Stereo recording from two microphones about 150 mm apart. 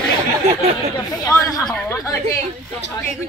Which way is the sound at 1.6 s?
5° left (ahead or behind).